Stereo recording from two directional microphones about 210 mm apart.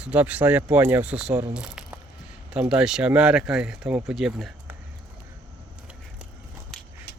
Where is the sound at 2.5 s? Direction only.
5° right (ahead or behind).